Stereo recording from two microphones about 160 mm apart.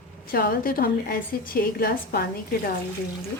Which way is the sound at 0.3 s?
65° left (ahead or behind).